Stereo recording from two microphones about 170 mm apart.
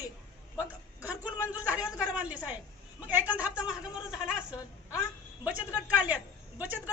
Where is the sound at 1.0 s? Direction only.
10° right (ahead or behind).